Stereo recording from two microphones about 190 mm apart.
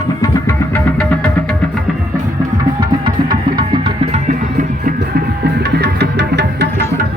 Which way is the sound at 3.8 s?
35° right (ahead or behind).